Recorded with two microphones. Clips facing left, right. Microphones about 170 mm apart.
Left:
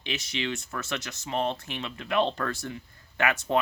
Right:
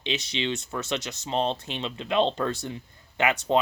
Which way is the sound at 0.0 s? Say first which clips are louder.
Right 3 dB; 20° right (ahead or behind).